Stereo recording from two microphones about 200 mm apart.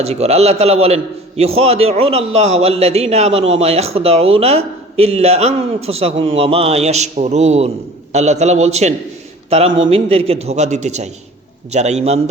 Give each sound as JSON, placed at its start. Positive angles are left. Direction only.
{"t": 0.0, "sound": "speech", "side_deg": -30}
{"t": 9.6, "sound": "a man's voice", "side_deg": -75}
{"t": 9.9, "sound": "speech", "side_deg": -30}